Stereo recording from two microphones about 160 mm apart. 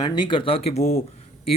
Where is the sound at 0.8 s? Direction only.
75° left (ahead or behind).